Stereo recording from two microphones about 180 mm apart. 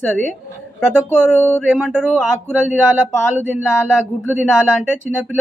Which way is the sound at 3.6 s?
15° left (ahead or behind).